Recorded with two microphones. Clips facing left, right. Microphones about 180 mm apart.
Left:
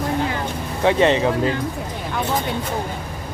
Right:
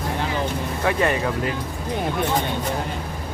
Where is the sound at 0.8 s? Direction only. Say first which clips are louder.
Left 6 dB; 25° left (ahead or behind).